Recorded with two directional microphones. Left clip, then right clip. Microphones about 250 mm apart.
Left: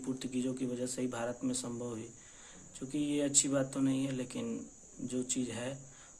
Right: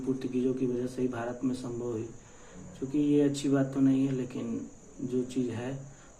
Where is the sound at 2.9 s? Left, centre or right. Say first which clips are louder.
Right 6 dB; left.